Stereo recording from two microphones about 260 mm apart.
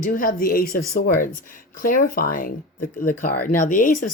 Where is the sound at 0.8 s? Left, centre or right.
Left.